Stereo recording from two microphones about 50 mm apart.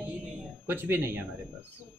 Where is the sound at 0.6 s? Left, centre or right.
Right.